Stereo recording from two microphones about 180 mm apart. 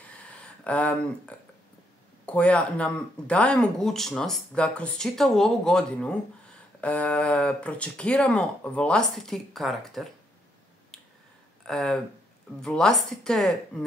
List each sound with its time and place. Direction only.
0.7 s speech: 5° left (ahead or behind)
11.6 s speech: 5° left (ahead or behind)